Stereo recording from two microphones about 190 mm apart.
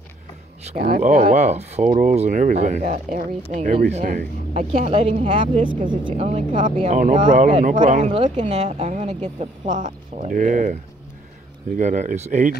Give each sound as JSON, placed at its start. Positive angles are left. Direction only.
{"t": 0.7, "sound": "speech", "side_deg": -45}